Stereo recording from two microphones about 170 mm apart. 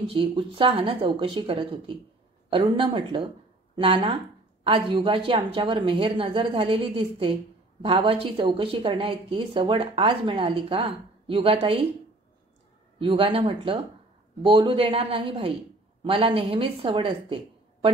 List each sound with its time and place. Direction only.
0.1 s speech: 30° right (ahead or behind)
13.0 s speech: 35° right (ahead or behind)